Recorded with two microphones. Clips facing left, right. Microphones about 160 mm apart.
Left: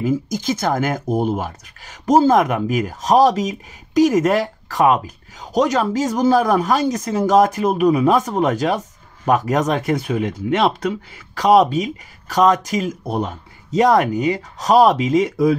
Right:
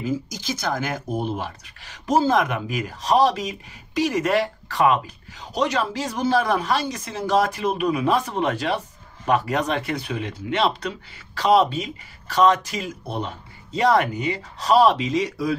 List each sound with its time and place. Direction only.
0.0 s speech: 50° left (ahead or behind)